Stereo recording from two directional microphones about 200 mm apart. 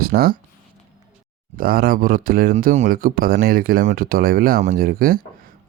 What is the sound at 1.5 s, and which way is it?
Speech, 50° right (ahead or behind).